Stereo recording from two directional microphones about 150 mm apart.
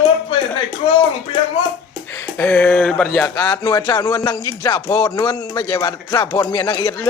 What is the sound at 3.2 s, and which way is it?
Speech, 25° left (ahead or behind).